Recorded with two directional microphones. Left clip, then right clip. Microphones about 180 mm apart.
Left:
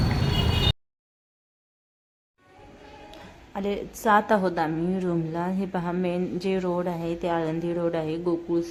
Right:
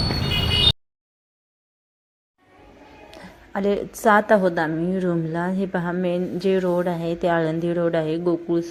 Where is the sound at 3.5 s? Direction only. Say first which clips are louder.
Right 7 dB; 20° right (ahead or behind).